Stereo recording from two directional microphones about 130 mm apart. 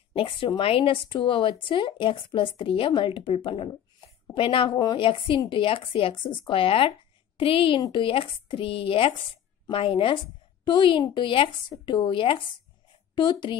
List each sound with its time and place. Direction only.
0.1 s speech: 45° left (ahead or behind)
4.7 s a woman's voice: 30° left (ahead or behind)
5.0 s a woman's voice: 45° left (ahead or behind)